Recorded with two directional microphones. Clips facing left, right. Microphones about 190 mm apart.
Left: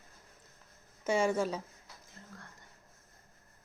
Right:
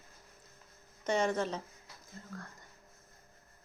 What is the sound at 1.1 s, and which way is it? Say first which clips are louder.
Speech: left 2 dB; 10° left (ahead or behind).